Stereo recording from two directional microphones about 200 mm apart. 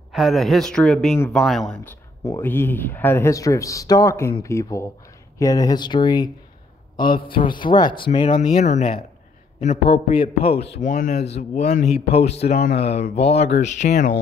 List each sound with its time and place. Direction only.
0.1 s a man's voice: centre (ahead or behind)
2.2 s a man's voice: 15° left (ahead or behind)
8.3 s a man's voice: 40° left (ahead or behind)
12.4 s speech: 50° left (ahead or behind)
12.8 s speech: 30° left (ahead or behind)